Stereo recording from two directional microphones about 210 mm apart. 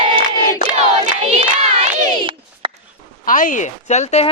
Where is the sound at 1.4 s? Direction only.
30° right (ahead or behind).